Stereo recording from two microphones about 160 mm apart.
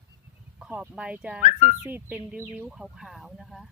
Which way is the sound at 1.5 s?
45° left (ahead or behind).